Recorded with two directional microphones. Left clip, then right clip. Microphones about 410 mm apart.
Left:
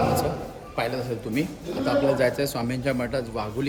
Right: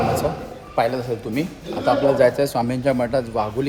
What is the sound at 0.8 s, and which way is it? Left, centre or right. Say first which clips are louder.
A man's voice: right 7 dB; centre.